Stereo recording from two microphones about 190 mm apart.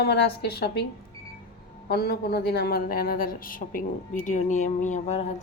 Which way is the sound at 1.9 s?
55° left (ahead or behind).